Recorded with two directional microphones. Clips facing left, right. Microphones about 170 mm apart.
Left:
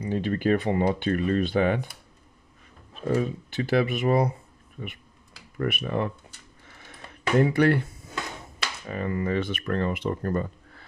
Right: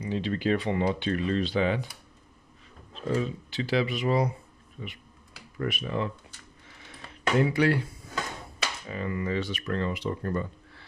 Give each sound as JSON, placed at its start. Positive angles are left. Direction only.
{"t": 0.1, "sound": "speech", "side_deg": 50}
{"t": 7.3, "sound": "speech", "side_deg": 55}
{"t": 8.8, "sound": "speech", "side_deg": 50}